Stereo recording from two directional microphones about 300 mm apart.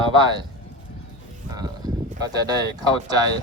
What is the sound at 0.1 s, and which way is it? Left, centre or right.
Speech, centre.